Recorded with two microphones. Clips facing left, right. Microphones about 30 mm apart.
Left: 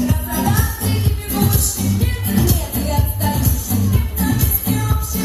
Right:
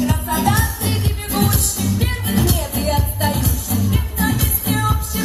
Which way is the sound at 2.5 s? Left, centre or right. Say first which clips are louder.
Right 2 dB; right.